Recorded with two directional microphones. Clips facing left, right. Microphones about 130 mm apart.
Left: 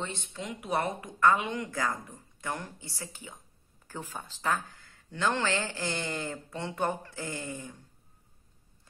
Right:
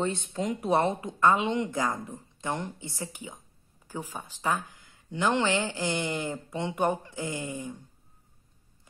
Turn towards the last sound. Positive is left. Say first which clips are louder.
# right 4 dB
turn(degrees=-15)  # may be behind; listen again after turning